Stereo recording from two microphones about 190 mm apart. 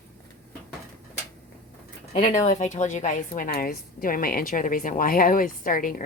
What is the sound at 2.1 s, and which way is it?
A woman's voice, 40° left (ahead or behind).